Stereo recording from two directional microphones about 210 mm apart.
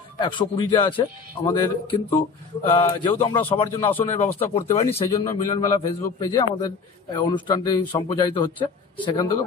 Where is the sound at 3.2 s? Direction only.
25° left (ahead or behind).